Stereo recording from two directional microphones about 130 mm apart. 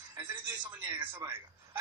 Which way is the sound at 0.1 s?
15° right (ahead or behind).